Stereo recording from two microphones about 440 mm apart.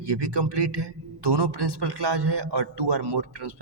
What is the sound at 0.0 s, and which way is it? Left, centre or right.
A man's voice, right.